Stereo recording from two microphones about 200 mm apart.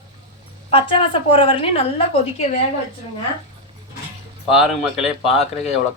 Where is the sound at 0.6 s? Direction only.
25° left (ahead or behind).